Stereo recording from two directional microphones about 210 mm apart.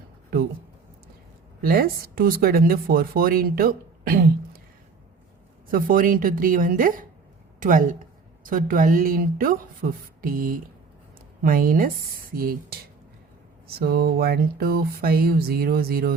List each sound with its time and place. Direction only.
1.6 s speech: 45° right (ahead or behind)
5.6 s a woman's voice: 40° right (ahead or behind)
13.7 s speech: 45° right (ahead or behind)